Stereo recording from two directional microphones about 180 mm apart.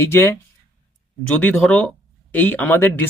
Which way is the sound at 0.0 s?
15° left (ahead or behind).